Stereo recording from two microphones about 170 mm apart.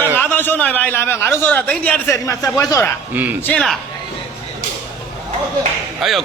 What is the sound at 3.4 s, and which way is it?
Speech, 5° left (ahead or behind).